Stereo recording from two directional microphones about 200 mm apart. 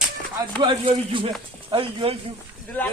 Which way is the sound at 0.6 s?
25° right (ahead or behind).